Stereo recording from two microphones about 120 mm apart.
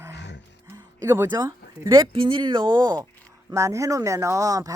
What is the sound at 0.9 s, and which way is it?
Speech, 20° right (ahead or behind).